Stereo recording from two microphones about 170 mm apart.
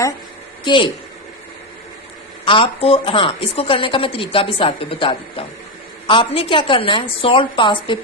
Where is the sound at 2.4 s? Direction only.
30° left (ahead or behind).